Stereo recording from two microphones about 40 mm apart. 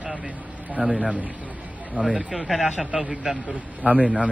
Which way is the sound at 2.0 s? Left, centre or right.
Right.